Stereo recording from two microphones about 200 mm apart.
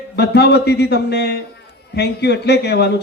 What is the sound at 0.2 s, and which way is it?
A man's voice, 55° left (ahead or behind).